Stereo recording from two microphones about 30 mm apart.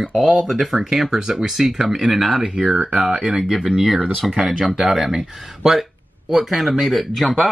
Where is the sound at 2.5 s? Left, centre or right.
Right.